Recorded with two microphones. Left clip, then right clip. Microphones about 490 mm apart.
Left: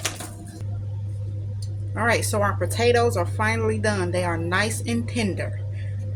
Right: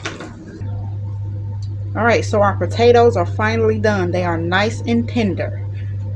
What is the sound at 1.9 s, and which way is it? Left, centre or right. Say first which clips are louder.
Speech: right 7 dB; left.